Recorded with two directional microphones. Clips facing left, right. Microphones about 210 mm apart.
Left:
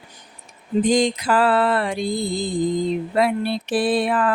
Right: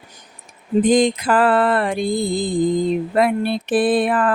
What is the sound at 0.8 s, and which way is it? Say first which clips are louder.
Mantra: right 3 dB; 55° right (ahead or behind).